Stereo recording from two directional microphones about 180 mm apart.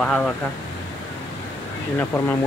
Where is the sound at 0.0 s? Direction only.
5° left (ahead or behind).